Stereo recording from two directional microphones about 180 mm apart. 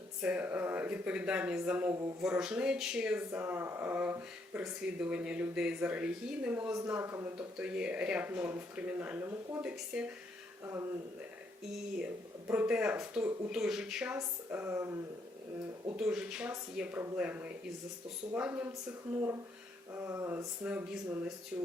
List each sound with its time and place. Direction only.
0.2 s speech: 5° right (ahead or behind)
11.9 s speech: 10° right (ahead or behind)
16.0 s speech: 5° right (ahead or behind)
19.9 s speech: 15° right (ahead or behind)